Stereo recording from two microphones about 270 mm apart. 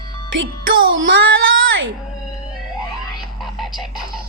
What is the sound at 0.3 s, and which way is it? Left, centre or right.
Music, right.